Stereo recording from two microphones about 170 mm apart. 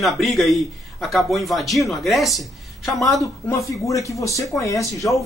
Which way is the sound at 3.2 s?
20° left (ahead or behind).